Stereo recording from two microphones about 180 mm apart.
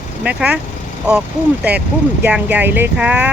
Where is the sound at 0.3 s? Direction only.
5° right (ahead or behind).